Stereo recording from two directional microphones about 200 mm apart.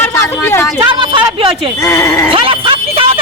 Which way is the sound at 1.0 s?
25° right (ahead or behind).